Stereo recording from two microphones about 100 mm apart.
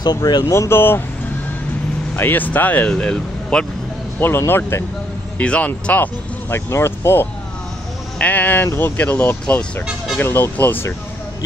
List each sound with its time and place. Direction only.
0.0 s speech: 45° left (ahead or behind)
0.5 s speech: 25° left (ahead or behind)
2.1 s speech: 20° left (ahead or behind)
4.2 s speech: 25° left (ahead or behind)
5.4 s speech: 10° left (ahead or behind)
6.5 s speech: 25° left (ahead or behind)